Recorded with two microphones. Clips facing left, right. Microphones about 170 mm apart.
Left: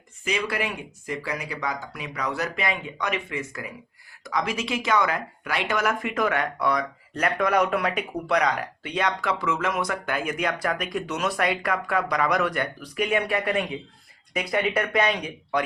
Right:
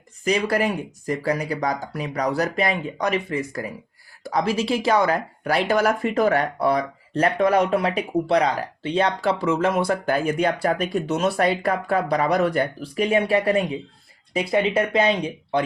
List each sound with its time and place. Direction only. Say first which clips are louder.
0.3 s speech: right 7 dB; 40° right (ahead or behind)